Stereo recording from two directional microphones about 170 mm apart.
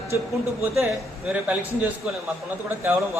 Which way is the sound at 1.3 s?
5° right (ahead or behind).